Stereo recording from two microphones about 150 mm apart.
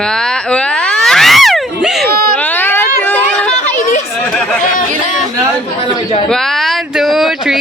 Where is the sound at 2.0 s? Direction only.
85° right.